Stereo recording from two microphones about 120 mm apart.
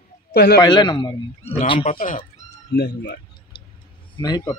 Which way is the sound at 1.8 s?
90° left.